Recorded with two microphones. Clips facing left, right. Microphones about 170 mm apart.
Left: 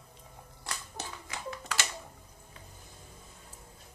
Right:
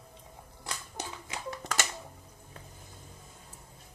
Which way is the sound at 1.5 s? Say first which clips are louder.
Right 3 dB; 40° right (ahead or behind).